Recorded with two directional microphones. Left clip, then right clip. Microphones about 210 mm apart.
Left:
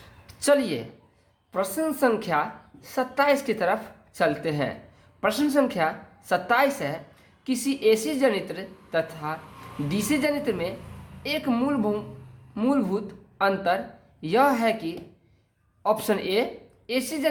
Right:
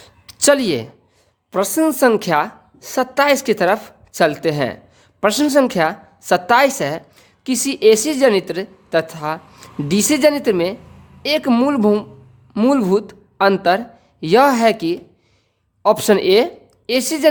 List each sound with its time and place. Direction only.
0.3 s a woman's voice: 55° right (ahead or behind)